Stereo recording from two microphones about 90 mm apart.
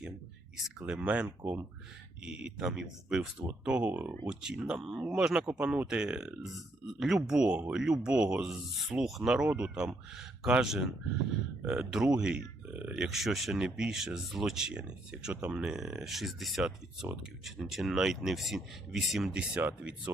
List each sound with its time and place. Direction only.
0.5 s speech: 5° right (ahead or behind)